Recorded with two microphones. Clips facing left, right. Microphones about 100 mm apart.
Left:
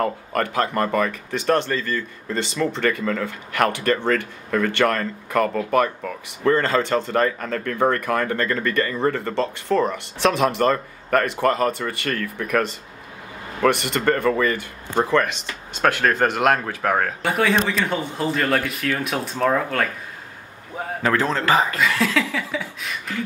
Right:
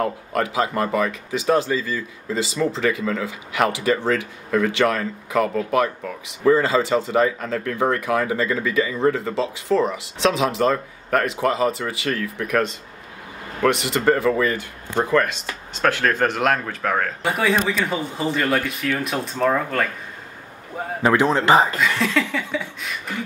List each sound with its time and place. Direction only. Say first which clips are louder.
0.0 s speech: even; 5° right (ahead or behind)
21.0 s a man's voice: right 4 dB; 15° right (ahead or behind)
21.7 s a sound: even; centre (ahead or behind)